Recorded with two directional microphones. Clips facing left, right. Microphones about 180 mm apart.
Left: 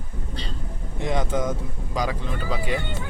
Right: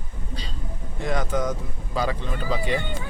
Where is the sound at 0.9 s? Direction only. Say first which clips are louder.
Left 1 dB; 20° left (ahead or behind).